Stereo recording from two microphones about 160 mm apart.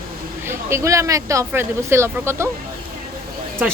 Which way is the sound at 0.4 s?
15° right (ahead or behind).